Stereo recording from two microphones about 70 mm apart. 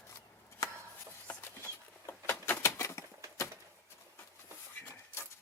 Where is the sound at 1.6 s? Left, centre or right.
Left.